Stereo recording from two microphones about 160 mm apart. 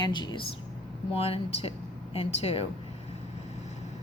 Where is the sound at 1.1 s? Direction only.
40° left (ahead or behind).